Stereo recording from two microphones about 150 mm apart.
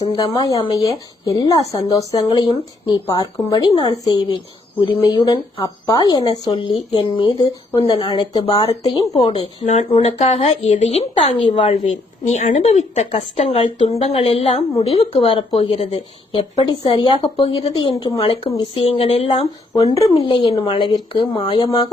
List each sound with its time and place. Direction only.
0.1 s speech: 35° left (ahead or behind)
0.4 s speech: 25° left (ahead or behind)
6.5 s speech: 35° left (ahead or behind)
7.9 s speech: 40° left (ahead or behind)
9.2 s a woman's voice: 40° left (ahead or behind)
11.9 s a woman's voice: 50° left (ahead or behind)
17.9 s speech: 25° left (ahead or behind)
19.7 s speech: 25° left (ahead or behind)
20.0 s speech: 35° left (ahead or behind)